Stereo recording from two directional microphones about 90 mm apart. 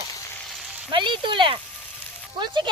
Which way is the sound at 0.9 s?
65° right (ahead or behind).